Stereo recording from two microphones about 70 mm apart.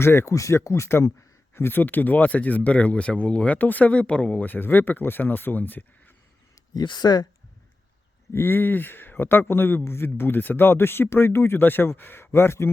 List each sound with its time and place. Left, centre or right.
0.0 s speech: left
6.7 s speech: left
8.3 s speech: left